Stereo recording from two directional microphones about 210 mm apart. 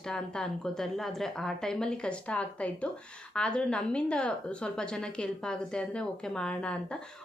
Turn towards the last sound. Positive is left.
turn(degrees=5)  # may be behind; listen again after turning